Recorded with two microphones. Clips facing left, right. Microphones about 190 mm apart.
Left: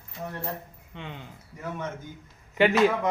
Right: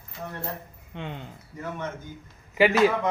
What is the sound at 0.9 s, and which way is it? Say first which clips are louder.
Speech: right 4 dB; 15° right (ahead or behind).